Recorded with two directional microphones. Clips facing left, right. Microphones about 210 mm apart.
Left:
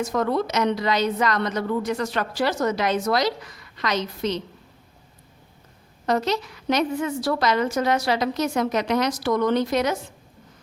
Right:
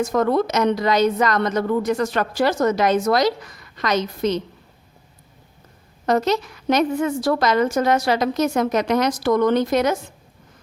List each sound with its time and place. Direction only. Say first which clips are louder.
0.0 s a woman's voice: right 4 dB; 50° right (ahead or behind)
6.1 s a woman's voice: right 4 dB; 45° right (ahead or behind)